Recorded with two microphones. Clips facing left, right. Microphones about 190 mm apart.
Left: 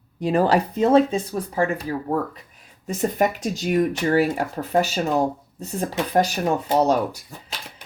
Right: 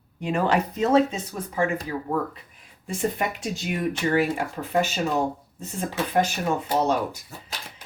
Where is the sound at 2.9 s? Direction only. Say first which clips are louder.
Left 5 dB; 40° left (ahead or behind).